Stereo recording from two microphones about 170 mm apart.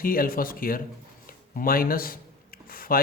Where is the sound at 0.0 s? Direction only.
60° left (ahead or behind).